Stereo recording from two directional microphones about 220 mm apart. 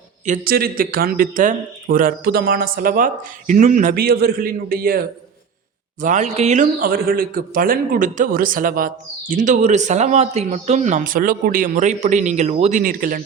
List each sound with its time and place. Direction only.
0.3 s a man's voice: 40° right (ahead or behind)